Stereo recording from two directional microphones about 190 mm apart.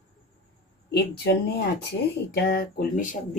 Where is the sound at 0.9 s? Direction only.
60° left (ahead or behind).